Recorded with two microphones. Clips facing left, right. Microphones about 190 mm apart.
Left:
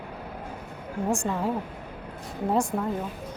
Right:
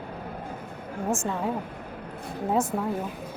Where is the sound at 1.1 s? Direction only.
Centre (ahead or behind).